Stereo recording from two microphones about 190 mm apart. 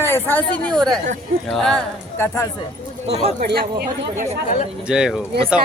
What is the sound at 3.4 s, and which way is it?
Speech, 55° right (ahead or behind).